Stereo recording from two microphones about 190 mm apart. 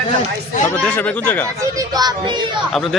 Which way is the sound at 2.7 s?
Centre (ahead or behind).